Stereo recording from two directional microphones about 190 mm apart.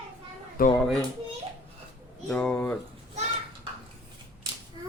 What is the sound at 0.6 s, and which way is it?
Speech, 50° left (ahead or behind).